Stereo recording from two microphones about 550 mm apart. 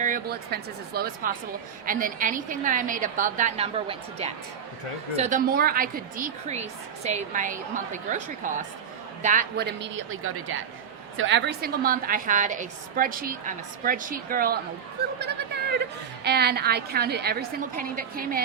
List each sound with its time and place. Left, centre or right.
0.0 s a woman's voice: centre